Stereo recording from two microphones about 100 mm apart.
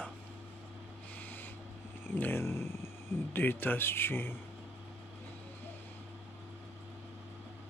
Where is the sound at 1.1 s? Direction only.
20° left (ahead or behind).